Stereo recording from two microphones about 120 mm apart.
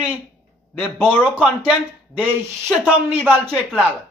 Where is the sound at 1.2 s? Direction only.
10° right (ahead or behind).